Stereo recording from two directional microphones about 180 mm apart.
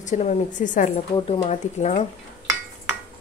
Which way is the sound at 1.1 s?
30° left (ahead or behind).